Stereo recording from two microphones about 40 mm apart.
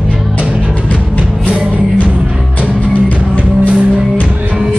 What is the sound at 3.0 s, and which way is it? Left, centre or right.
Music, left.